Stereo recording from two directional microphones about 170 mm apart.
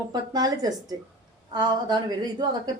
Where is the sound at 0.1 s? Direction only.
25° right (ahead or behind).